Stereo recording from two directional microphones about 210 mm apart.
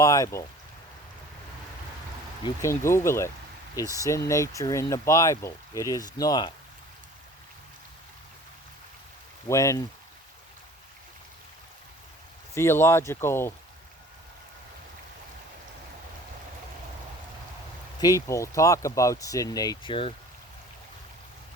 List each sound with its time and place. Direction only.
0.0 s speech: 15° left (ahead or behind)
2.4 s speech: 15° left (ahead or behind)
9.5 s speech: 15° left (ahead or behind)
12.5 s speech: 10° left (ahead or behind)
18.0 s speech: 15° left (ahead or behind)